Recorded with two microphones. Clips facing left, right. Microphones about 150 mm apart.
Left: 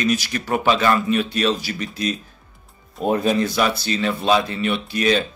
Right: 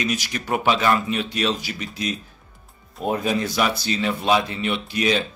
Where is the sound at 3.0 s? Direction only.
5° right (ahead or behind).